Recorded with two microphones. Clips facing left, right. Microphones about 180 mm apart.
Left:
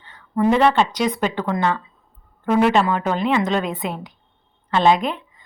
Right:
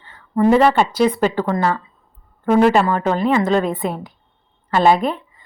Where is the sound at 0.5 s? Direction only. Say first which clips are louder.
Right 2 dB; 5° right (ahead or behind).